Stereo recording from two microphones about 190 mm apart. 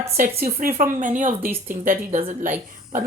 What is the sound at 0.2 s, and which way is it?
Speech, 50° right (ahead or behind).